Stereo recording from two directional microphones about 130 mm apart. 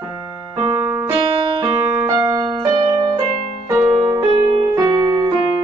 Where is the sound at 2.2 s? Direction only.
30° right (ahead or behind).